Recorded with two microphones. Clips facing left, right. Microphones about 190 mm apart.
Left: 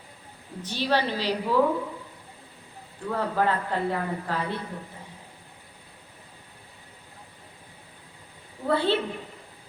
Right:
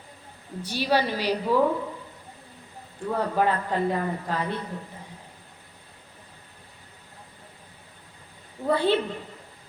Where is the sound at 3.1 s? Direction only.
15° right (ahead or behind).